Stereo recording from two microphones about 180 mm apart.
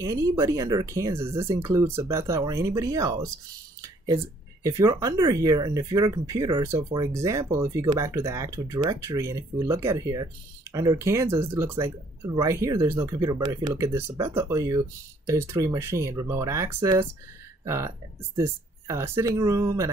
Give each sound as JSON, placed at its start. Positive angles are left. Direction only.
{"t": 0.0, "sound": "speech", "side_deg": -20}
{"t": 3.8, "sound": "a sound", "side_deg": -20}
{"t": 4.6, "sound": "speech", "side_deg": -15}